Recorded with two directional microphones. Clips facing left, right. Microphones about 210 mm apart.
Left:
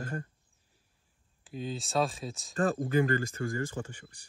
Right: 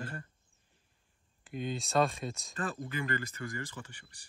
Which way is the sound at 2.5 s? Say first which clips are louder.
Left 12 dB; 45° left (ahead or behind).